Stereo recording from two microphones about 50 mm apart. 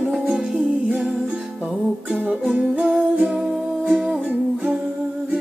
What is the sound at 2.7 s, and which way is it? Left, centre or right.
Music, right.